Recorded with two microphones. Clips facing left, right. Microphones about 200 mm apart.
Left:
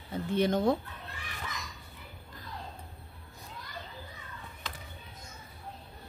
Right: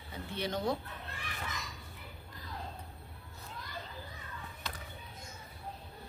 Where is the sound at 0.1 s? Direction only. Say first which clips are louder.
Left 9 dB; 50° left (ahead or behind).